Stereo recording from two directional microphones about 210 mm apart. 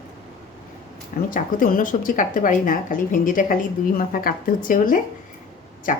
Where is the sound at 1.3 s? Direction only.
40° left (ahead or behind).